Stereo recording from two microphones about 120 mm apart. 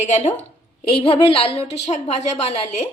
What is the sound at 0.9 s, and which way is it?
A woman's voice, 55° left (ahead or behind).